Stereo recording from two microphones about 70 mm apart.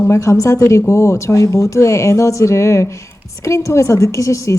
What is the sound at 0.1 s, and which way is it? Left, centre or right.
A woman's voice, left.